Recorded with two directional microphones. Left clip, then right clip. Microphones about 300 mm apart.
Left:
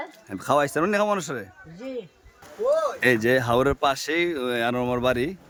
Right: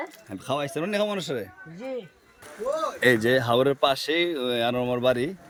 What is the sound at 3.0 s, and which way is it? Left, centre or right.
Speech, centre.